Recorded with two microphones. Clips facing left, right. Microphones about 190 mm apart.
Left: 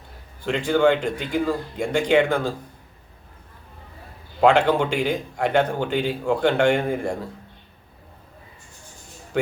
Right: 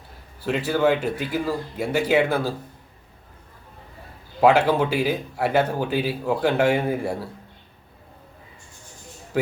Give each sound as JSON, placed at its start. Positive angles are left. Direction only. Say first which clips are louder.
{"t": 0.4, "sound": "speech", "louder": "left 2 dB", "side_deg": -5}
{"t": 4.4, "sound": "speech", "louder": "even", "side_deg": -5}